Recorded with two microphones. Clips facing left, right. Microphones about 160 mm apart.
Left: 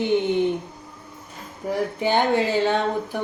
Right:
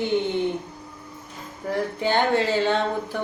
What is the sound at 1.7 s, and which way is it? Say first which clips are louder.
Speech: left 1 dB; 15° left (ahead or behind).